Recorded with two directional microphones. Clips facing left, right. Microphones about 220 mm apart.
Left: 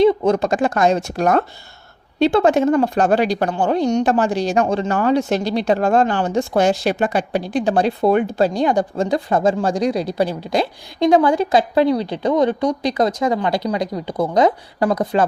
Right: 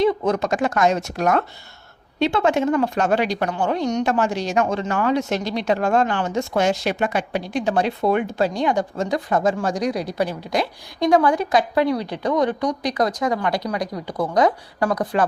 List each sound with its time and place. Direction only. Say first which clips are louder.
0.0 s a woman's voice: left 5 dB; 25° left (ahead or behind)